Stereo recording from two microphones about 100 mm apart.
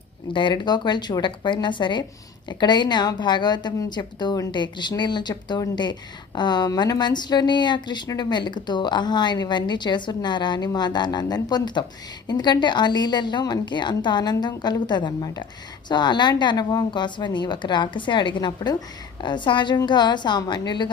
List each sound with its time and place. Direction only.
0.3 s a woman's voice: 50° left (ahead or behind)